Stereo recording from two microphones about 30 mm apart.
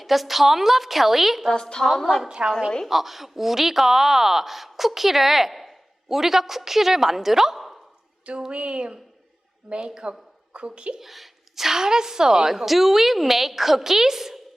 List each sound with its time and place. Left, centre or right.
0.0 s a woman's voice: centre
1.5 s a woman's voice: left
1.9 s a woman's voice: centre
2.8 s a woman's voice: centre
8.5 s a woman's voice: right
11.0 s a woman's voice: centre; by 12.5 s right
12.5 s a woman's voice: centre